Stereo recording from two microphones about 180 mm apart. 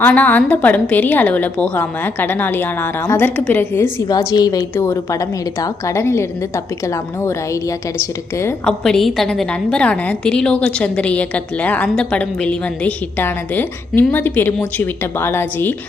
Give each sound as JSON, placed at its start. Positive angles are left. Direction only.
{"t": 0.0, "sound": "a woman's voice", "side_deg": 10}
{"t": 8.6, "sound": "a woman's voice", "side_deg": 5}